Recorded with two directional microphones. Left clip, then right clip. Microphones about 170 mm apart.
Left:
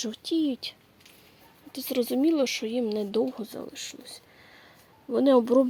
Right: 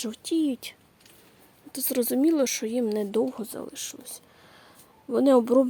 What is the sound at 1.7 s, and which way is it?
Speech, 10° right (ahead or behind).